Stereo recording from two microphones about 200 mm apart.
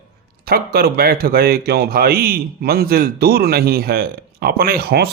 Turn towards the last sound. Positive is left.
turn(degrees=-50)  # may be behind; listen again after turning